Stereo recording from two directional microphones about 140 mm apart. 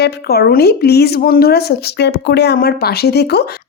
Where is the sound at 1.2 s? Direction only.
90° left.